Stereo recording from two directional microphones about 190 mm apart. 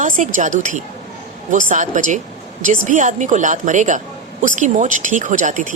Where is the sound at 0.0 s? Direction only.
40° right (ahead or behind).